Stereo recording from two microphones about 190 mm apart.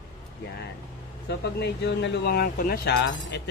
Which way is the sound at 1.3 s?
60° left (ahead or behind).